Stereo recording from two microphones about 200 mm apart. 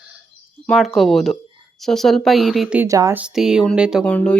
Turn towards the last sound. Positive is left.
turn(degrees=5)  # may be behind; listen again after turning